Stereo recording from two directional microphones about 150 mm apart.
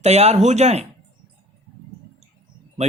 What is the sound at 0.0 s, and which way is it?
Speech, 45° right (ahead or behind).